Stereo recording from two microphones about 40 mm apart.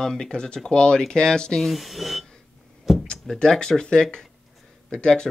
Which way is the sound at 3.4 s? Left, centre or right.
Centre.